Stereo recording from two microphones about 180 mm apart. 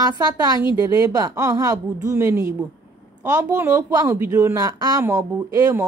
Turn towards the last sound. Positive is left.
turn(degrees=-20)  # may be behind; listen again after turning